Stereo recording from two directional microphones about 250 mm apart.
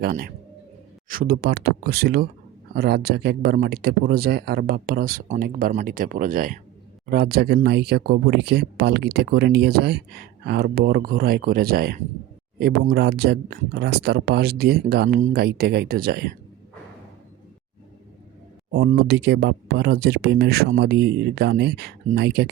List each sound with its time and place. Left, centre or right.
0.0 s speech: right
18.7 s speech: right